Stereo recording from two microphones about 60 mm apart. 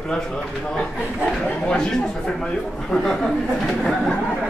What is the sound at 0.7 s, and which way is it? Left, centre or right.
Speech, centre.